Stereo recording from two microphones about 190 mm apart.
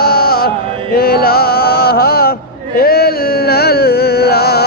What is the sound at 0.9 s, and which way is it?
Mantra, 50° left (ahead or behind).